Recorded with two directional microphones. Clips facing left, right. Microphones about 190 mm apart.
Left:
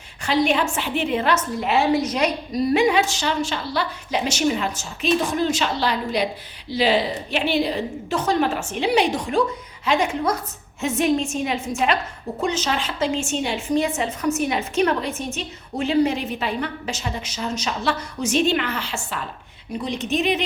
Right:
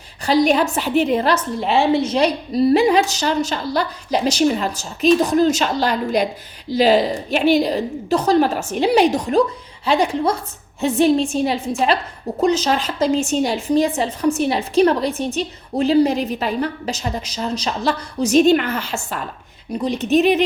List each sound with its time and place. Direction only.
0.3 s a woman's voice: 40° right (ahead or behind)
19.9 s speech: 5° right (ahead or behind)